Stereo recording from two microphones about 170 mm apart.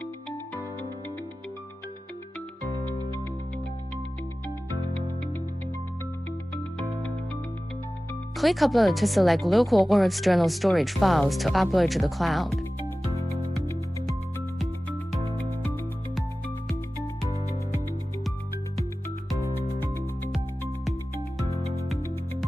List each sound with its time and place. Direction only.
8.4 s speech: centre (ahead or behind)
19.8 s music: 15° left (ahead or behind)
20.2 s music: centre (ahead or behind)
21.4 s music: 20° left (ahead or behind)